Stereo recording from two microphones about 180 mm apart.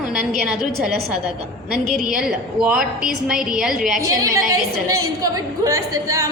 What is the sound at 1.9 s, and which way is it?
A woman's voice, centre (ahead or behind).